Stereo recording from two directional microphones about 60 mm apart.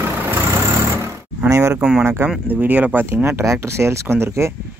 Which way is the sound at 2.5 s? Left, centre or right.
Right.